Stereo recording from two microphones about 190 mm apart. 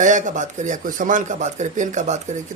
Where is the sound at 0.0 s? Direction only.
40° right (ahead or behind).